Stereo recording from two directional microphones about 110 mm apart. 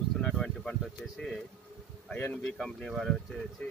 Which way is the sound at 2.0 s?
15° left (ahead or behind).